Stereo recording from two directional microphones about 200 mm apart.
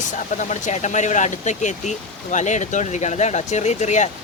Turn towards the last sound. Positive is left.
turn(degrees=35)  # may be behind; listen again after turning